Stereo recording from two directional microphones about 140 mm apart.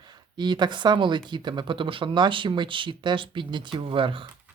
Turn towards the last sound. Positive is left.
turn(degrees=-40)  # may be behind; listen again after turning